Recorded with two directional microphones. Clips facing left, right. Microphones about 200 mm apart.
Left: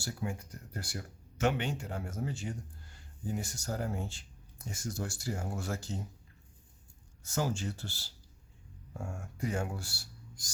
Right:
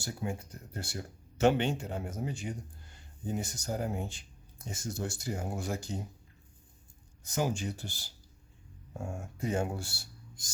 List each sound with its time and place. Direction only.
0.0 s a man's voice: 25° right (ahead or behind)
1.4 s a man's voice: 30° right (ahead or behind)
7.2 s speech: 15° right (ahead or behind)